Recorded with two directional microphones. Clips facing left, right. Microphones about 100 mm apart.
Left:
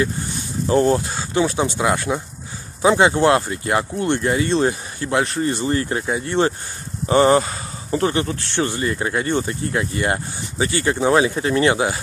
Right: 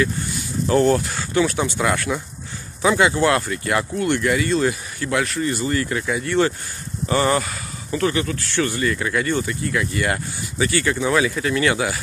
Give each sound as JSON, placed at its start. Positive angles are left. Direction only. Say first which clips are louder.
{"t": 0.0, "sound": "speech", "louder": "even", "side_deg": 25}